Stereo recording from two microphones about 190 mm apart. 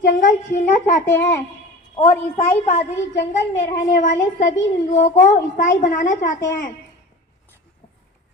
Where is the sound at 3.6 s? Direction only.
40° left (ahead or behind).